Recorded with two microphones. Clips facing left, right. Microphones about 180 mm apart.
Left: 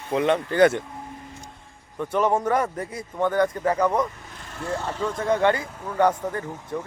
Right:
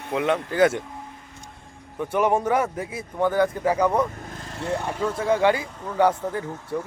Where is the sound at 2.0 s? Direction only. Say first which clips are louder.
Right 1 dB; 10° right (ahead or behind).